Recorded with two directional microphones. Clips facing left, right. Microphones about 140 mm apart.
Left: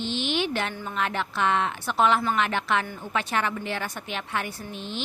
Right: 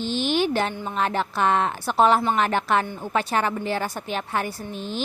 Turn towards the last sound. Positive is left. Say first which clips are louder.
# right 4 dB
turn(degrees=-40)  # may be behind; listen again after turning